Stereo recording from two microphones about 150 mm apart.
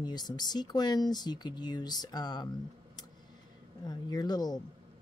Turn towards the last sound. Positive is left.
turn(degrees=25)  # may be behind; listen again after turning